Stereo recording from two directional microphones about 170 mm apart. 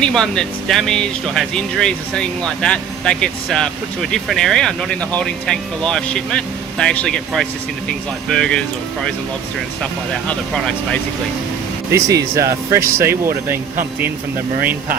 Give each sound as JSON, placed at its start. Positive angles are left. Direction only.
{"t": 0.0, "sound": "speech", "side_deg": 5}
{"t": 10.2, "sound": "speech", "side_deg": 5}
{"t": 11.9, "sound": "speech", "side_deg": -20}